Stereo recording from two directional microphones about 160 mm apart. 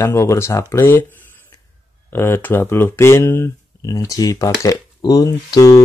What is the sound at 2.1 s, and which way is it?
Speech, 15° left (ahead or behind).